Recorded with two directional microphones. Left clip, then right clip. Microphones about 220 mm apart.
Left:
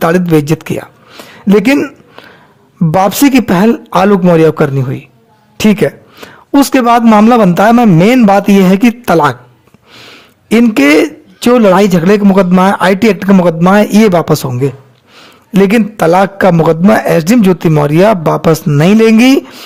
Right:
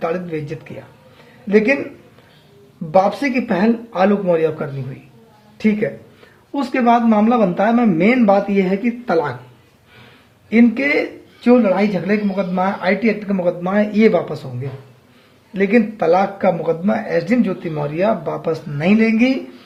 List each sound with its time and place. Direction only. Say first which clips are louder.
0.0 s a man's voice: left 13 dB; 50° left (ahead or behind)
2.9 s a man's voice: left 7 dB; 55° left (ahead or behind)
10.5 s a man's voice: left 9 dB; 55° left (ahead or behind)
15.5 s a man's voice: left 7 dB; 50° left (ahead or behind)